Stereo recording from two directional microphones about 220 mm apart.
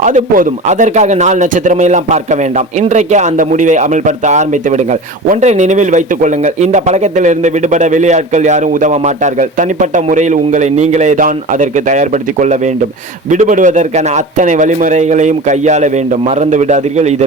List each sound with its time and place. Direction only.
0.0 s a man's voice: 35° right (ahead or behind)